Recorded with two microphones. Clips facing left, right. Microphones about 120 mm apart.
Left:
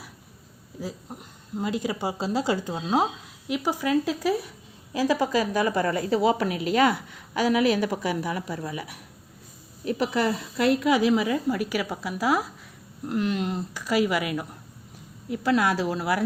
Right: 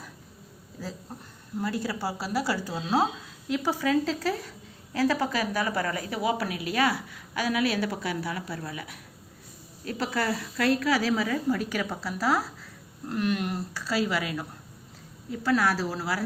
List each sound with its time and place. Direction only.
0.8 s a woman's voice: 15° left (ahead or behind)
5.6 s a woman's voice: 30° left (ahead or behind)
9.8 s a woman's voice: 20° left (ahead or behind)